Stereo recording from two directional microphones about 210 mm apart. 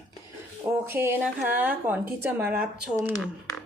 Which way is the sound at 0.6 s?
10° right (ahead or behind).